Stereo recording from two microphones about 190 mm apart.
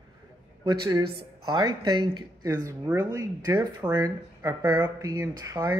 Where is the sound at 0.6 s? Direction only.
20° right (ahead or behind).